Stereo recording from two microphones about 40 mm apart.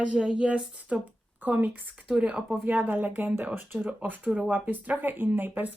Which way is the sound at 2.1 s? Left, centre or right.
Right.